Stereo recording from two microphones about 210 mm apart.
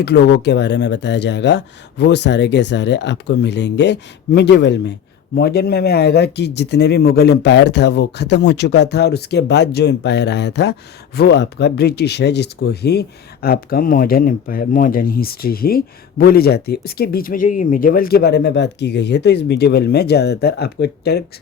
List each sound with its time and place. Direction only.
0.0 s speech: 50° left (ahead or behind)